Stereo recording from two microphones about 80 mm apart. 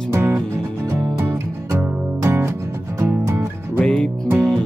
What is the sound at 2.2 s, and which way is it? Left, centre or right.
Music, right.